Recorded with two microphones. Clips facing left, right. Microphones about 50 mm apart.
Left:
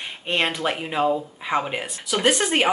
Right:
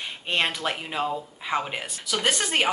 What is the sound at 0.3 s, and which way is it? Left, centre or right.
Speech, centre.